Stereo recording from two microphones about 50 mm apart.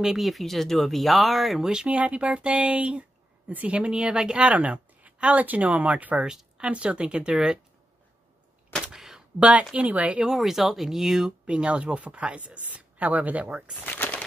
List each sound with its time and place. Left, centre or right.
0.0 s speech: centre
1.9 s speech: right
6.2 s speech: centre
8.9 s a sound: centre
9.4 s speech: right
10.2 s speech: centre
11.4 s speech: right